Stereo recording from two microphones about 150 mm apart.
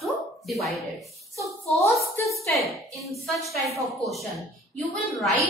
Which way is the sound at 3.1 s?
Centre (ahead or behind).